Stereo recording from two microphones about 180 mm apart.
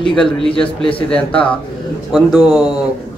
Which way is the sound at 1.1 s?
5° left (ahead or behind).